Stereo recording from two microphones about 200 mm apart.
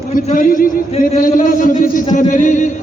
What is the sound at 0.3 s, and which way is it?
A man's voice, 45° left (ahead or behind).